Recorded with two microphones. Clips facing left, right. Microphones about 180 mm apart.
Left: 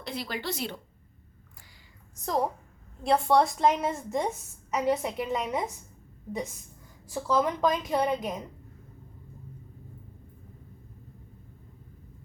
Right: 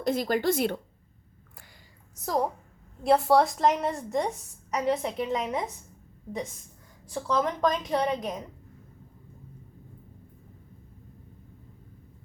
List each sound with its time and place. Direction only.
0.0 s a woman's voice: 45° right (ahead or behind)
2.2 s a woman's voice: centre (ahead or behind)
7.1 s a woman's voice: 10° left (ahead or behind)